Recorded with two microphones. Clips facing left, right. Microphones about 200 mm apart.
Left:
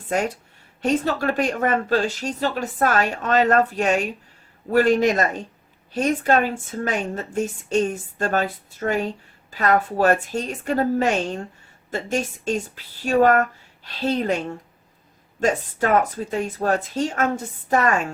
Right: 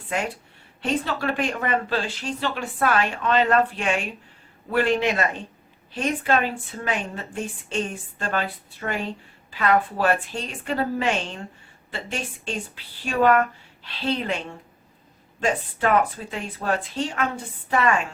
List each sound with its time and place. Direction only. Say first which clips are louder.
0.1 s a man's voice: left 4 dB; 45° left (ahead or behind)